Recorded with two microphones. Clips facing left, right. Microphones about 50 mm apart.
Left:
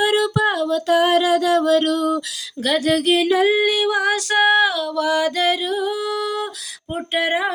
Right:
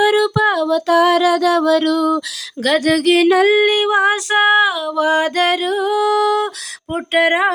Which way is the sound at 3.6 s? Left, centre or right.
Right.